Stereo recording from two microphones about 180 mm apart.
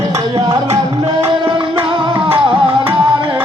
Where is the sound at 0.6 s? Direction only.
35° right (ahead or behind).